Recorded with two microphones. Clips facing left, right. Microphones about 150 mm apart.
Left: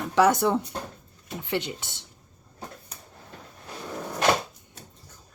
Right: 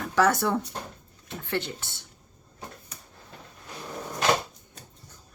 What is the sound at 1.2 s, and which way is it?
Speech, 15° left (ahead or behind).